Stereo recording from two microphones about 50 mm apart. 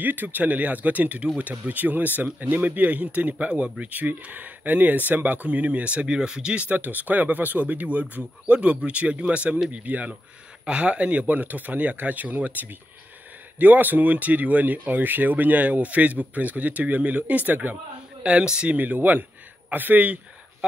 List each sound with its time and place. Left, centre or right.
0.0 s speech: right; by 6.6 s centre
6.6 s speech: right
18.2 s speech: centre
18.8 s speech: right